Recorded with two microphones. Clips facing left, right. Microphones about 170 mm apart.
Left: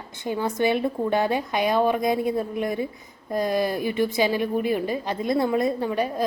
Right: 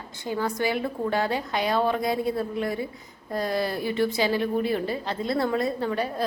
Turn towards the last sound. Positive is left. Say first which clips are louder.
# left 2 dB
turn(degrees=15)  # may be behind; listen again after turning